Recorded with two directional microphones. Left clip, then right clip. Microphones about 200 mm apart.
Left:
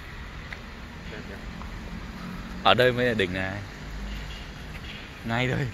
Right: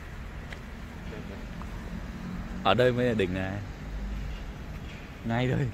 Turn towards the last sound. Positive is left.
turn(degrees=-10)  # may be behind; listen again after turning